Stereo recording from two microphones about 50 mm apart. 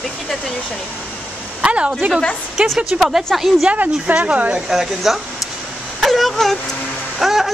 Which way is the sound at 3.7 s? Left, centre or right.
Right.